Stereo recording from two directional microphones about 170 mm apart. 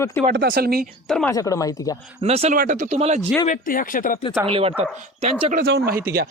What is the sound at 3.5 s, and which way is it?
Speech, 55° left (ahead or behind).